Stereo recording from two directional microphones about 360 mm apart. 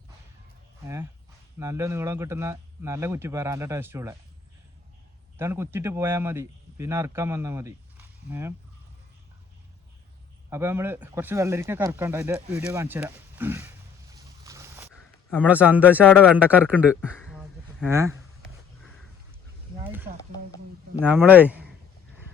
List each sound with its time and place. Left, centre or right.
1.5 s speech: centre
5.4 s speech: centre
10.5 s speech: centre
14.1 s boat: centre
14.9 s a man's voice: centre
19.8 s a sound: centre
21.0 s a man's voice: centre